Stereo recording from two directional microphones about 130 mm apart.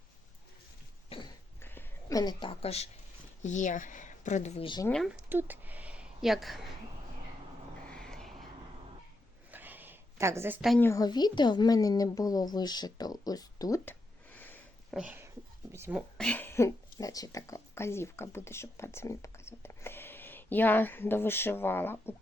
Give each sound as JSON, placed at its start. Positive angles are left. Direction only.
{"t": 1.6, "sound": "a sound", "side_deg": 15}
{"t": 2.1, "sound": "a woman's voice", "side_deg": 35}
{"t": 3.4, "sound": "speech", "side_deg": 70}
{"t": 4.9, "sound": "speech", "side_deg": 0}
{"t": 5.3, "sound": "speech", "side_deg": -15}
{"t": 7.9, "sound": "a sound", "side_deg": 5}
{"t": 9.5, "sound": "a sound", "side_deg": -15}
{"t": 10.8, "sound": "a woman's voice", "side_deg": 20}
{"t": 11.0, "sound": "a woman's voice", "side_deg": 35}
{"t": 14.3, "sound": "sniff", "side_deg": 15}
{"t": 14.8, "sound": "a sound", "side_deg": -5}
{"t": 15.7, "sound": "speech", "side_deg": -20}
{"t": 16.1, "sound": "speech", "side_deg": 10}